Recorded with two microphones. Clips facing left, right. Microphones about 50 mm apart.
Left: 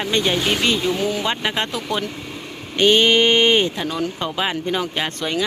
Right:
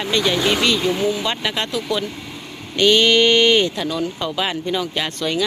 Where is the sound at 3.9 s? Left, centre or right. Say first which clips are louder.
Right 1 dB; left.